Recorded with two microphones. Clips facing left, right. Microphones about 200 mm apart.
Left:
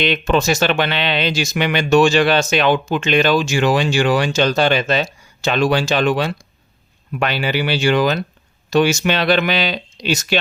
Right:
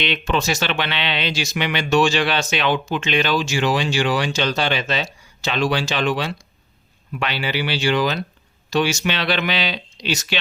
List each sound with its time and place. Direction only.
0.0 s speech: 45° left (ahead or behind)